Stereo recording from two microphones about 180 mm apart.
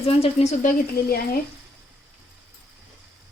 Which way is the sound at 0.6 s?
50° left (ahead or behind).